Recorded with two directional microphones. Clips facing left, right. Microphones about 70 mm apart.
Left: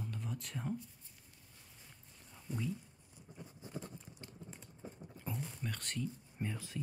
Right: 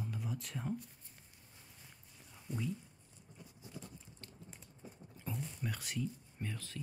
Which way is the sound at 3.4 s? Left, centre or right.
Left.